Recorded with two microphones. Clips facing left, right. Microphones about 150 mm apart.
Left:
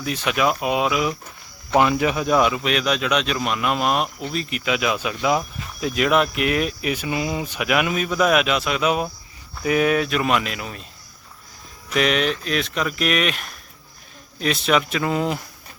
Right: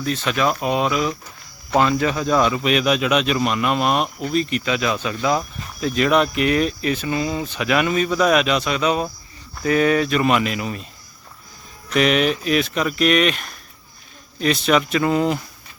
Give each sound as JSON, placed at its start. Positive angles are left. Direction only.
{"t": 0.0, "sound": "speech", "side_deg": 10}
{"t": 2.6, "sound": "speech", "side_deg": 0}
{"t": 11.9, "sound": "speech", "side_deg": 0}